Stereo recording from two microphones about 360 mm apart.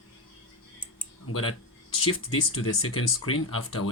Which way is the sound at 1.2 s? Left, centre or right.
Left.